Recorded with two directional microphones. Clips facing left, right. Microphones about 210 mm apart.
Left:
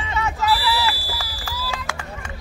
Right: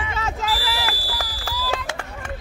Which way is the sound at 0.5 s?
45° right (ahead or behind).